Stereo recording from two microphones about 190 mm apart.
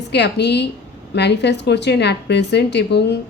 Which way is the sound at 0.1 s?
65° left (ahead or behind).